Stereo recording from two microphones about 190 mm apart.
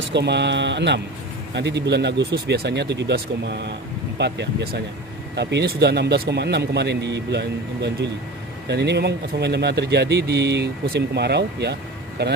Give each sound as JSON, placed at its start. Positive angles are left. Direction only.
{"t": 0.1, "sound": "speech", "side_deg": -65}